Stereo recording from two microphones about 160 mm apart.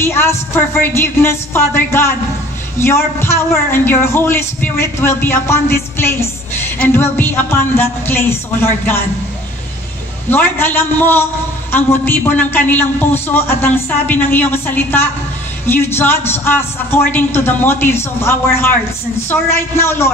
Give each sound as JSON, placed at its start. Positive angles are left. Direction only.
{"t": 0.0, "sound": "a man's voice", "side_deg": 15}
{"t": 10.3, "sound": "a man's voice", "side_deg": 10}